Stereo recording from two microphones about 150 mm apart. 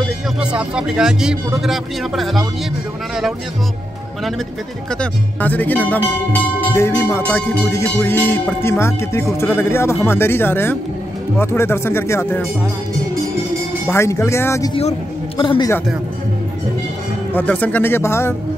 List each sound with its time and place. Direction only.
0.4 s speech: 5° right (ahead or behind)
5.4 s music: 10° left (ahead or behind)
13.8 s speech: 15° left (ahead or behind)
14.7 s a man's voice: 40° left (ahead or behind)
17.3 s music: 10° left (ahead or behind)